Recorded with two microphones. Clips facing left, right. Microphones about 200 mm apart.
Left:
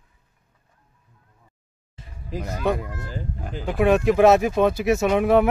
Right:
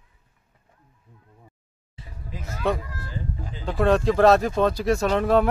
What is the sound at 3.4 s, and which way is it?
Speech, 65° left (ahead or behind).